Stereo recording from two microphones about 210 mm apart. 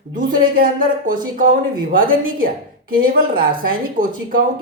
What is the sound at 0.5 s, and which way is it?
Speech, 40° right (ahead or behind).